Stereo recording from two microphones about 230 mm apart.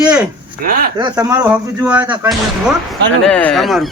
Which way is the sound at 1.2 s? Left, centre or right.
Centre.